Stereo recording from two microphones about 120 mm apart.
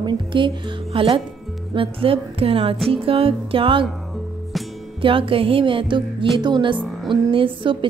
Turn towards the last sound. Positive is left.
turn(degrees=-45)  # may be behind; listen again after turning